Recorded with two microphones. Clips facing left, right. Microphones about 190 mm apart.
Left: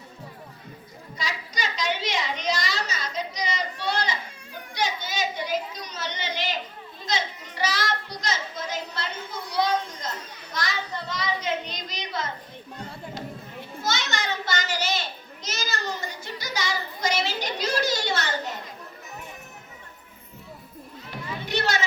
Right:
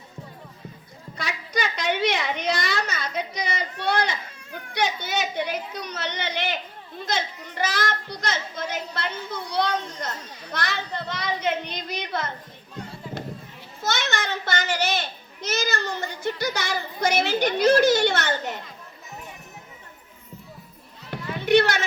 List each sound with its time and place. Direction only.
1.1 s a sound: 55° right (ahead or behind)
4.7 s a woman's voice: 60° right (ahead or behind)
13.8 s a child's voice: 55° right (ahead or behind)
21.4 s music: 60° right (ahead or behind)